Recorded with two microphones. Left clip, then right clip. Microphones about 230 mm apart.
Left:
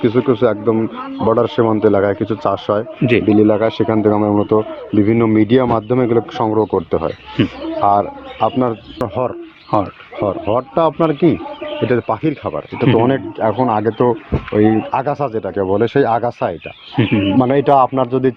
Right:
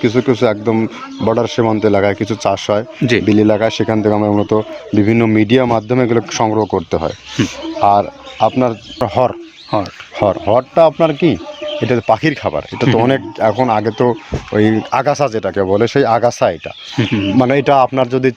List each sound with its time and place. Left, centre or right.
0.0 s speech: right
17.0 s speech: right
17.3 s speech: right